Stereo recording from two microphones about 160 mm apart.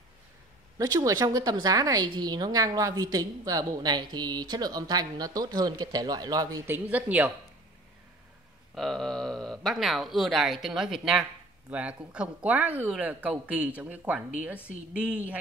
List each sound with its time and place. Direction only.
0.7 s a woman's voice: 20° right (ahead or behind)
6.9 s speech: 10° right (ahead or behind)
8.7 s speech: centre (ahead or behind)